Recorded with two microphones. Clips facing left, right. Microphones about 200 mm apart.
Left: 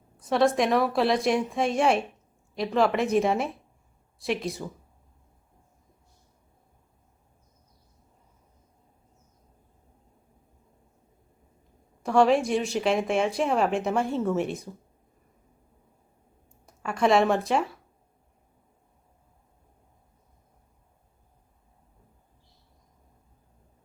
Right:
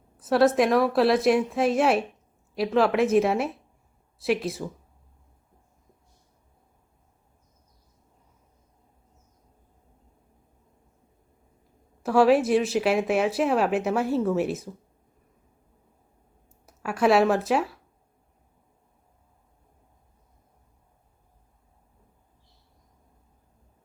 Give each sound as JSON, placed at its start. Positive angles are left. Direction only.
{"t": 0.2, "sound": "speech", "side_deg": -5}
{"t": 12.0, "sound": "speech", "side_deg": -5}
{"t": 16.6, "sound": "speech", "side_deg": -5}